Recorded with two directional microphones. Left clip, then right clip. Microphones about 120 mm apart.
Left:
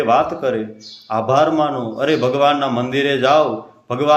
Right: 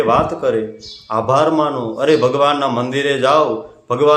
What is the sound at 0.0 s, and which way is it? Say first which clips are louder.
A man's voice: right 1 dB; 20° right (ahead or behind).